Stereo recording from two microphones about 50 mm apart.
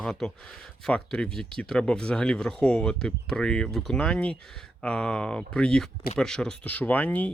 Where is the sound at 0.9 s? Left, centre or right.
Centre.